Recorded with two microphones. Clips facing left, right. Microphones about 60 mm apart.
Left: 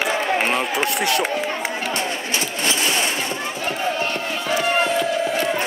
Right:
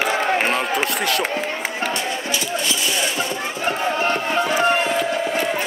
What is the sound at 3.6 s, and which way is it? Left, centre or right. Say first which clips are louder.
Crowd: right 3 dB; right.